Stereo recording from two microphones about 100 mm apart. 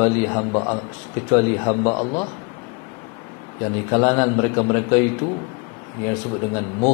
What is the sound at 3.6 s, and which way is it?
A man's voice, 25° left (ahead or behind).